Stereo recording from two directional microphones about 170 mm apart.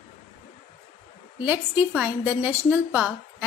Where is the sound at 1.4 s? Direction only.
10° right (ahead or behind).